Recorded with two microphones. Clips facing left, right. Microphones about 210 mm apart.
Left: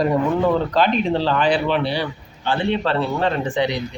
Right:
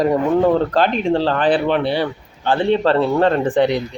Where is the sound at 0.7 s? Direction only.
50° right (ahead or behind).